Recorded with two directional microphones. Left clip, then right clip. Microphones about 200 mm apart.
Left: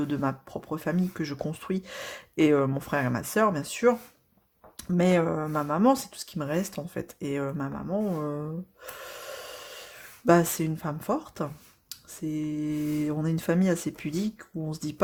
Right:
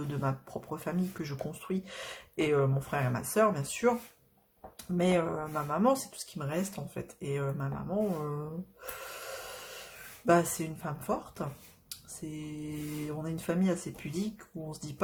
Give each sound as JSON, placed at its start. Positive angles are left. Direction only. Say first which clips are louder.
{"t": 0.1, "sound": "speech", "louder": "left 5 dB", "side_deg": 35}
{"t": 4.9, "sound": "speech", "louder": "left 5 dB", "side_deg": 40}